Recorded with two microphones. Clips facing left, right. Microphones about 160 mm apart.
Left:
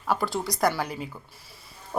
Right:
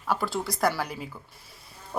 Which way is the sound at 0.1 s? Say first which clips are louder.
Left 1 dB; centre (ahead or behind).